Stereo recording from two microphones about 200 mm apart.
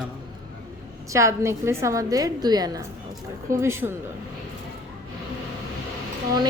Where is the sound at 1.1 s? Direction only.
15° right (ahead or behind).